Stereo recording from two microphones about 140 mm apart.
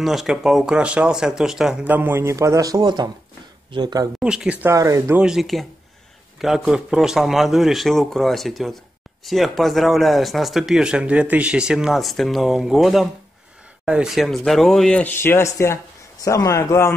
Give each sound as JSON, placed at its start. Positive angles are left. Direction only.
{"t": 0.0, "sound": "speech", "side_deg": 0}
{"t": 4.2, "sound": "speech", "side_deg": -5}
{"t": 4.7, "sound": "speech", "side_deg": -20}
{"t": 5.2, "sound": "a man's voice", "side_deg": 0}